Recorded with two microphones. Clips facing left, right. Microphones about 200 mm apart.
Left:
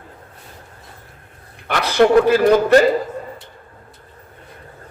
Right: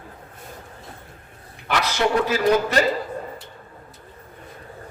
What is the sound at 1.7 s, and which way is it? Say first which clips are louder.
Speech: left 8 dB; 55° left (ahead or behind).